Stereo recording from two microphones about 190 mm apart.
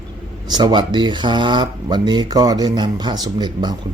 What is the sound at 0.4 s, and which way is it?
Speech, 20° right (ahead or behind).